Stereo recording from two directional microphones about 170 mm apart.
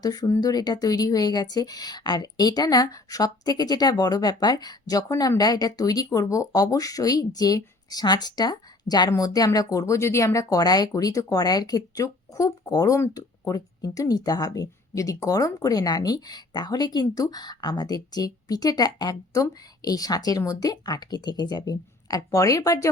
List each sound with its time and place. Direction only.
0.0 s speech: 20° left (ahead or behind)